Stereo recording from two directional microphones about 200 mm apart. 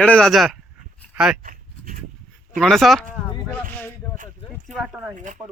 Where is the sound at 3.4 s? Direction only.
10° left (ahead or behind).